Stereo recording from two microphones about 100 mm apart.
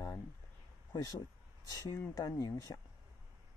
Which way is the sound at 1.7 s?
35° left (ahead or behind).